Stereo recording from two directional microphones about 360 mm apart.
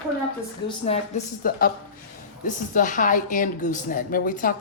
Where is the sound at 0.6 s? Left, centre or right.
Centre.